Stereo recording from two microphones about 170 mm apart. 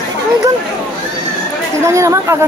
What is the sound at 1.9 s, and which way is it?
Speech, 15° right (ahead or behind).